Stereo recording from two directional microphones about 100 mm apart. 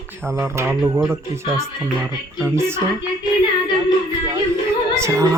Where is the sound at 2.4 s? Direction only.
25° right (ahead or behind).